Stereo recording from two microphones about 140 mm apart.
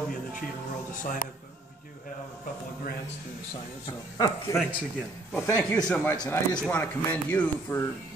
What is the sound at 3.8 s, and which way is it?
Speech, 30° left (ahead or behind).